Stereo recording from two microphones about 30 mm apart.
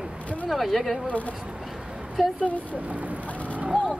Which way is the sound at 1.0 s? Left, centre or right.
Left.